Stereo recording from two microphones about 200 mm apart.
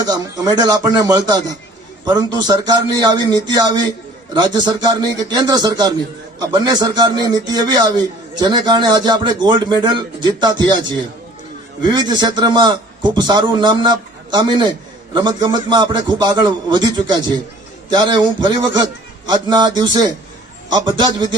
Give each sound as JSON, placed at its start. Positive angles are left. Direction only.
{"t": 0.0, "sound": "a man's voice", "side_deg": -20}